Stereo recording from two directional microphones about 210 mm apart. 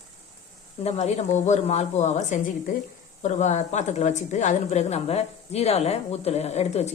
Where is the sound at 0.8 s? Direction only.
30° left (ahead or behind).